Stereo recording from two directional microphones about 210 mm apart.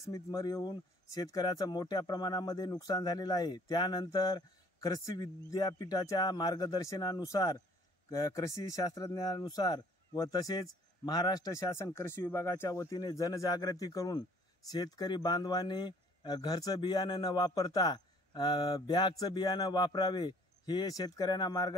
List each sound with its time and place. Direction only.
0.3 s speech: 15° left (ahead or behind)